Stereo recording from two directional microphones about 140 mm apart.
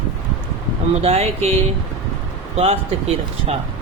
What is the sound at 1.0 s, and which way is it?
Speech, 50° right (ahead or behind).